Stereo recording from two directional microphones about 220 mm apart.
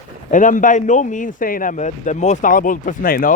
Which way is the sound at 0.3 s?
35° left (ahead or behind).